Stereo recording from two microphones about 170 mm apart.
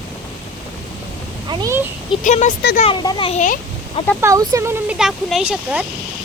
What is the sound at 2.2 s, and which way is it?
Speech, 45° left (ahead or behind).